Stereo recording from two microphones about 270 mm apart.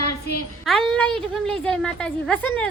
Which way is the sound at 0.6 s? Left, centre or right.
Centre.